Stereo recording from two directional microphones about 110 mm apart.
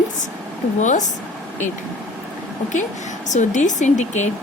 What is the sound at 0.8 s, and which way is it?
Speech, 90° left.